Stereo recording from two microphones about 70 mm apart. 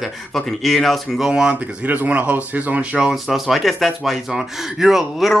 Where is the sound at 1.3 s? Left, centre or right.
Centre.